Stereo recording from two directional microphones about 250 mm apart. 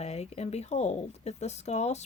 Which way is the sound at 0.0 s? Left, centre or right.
Left.